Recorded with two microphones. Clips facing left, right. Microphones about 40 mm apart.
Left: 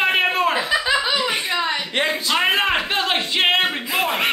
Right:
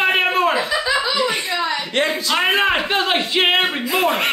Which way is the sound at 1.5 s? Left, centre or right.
Left.